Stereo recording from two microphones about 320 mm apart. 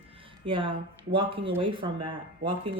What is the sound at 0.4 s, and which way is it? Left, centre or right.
Speech, centre.